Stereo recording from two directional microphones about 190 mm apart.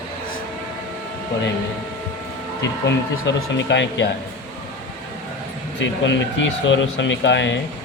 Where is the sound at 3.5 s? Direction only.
70° left (ahead or behind).